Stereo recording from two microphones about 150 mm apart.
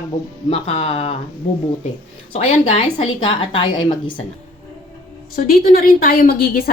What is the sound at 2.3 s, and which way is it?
A woman's voice, 40° left (ahead or behind).